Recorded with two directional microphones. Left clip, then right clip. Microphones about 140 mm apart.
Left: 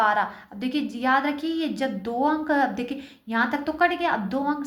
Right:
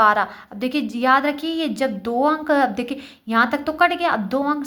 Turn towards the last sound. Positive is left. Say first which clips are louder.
# right 5 dB
turn(degrees=-40)  # may be behind; listen again after turning